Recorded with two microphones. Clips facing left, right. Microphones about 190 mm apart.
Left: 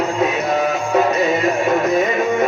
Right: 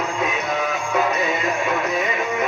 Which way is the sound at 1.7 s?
40° left (ahead or behind).